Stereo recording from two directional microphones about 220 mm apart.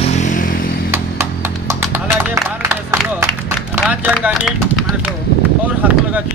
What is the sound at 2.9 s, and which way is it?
Clapping, 10° right (ahead or behind).